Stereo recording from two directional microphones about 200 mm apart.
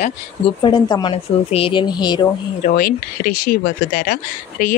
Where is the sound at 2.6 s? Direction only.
45° left (ahead or behind).